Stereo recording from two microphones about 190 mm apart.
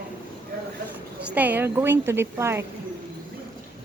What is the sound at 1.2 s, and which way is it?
A woman's voice, 10° right (ahead or behind).